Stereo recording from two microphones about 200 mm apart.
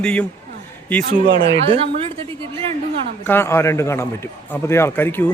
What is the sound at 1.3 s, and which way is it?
Speech, 55° right (ahead or behind).